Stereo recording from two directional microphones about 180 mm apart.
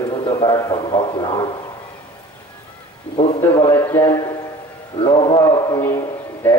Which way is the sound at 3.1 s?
35° left (ahead or behind).